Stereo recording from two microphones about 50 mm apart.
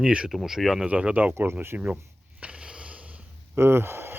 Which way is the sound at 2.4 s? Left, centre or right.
Right.